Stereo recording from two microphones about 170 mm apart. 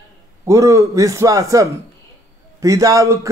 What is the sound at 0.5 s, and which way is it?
Speech, 20° right (ahead or behind).